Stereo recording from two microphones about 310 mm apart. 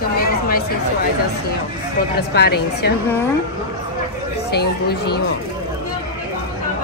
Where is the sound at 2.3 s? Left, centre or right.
Left.